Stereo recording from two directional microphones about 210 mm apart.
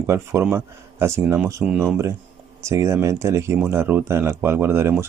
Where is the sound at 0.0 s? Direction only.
15° right (ahead or behind).